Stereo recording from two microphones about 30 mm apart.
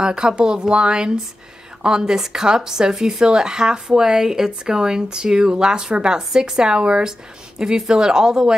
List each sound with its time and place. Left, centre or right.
0.0 s speech: right